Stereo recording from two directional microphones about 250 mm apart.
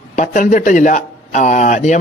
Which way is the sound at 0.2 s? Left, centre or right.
Left.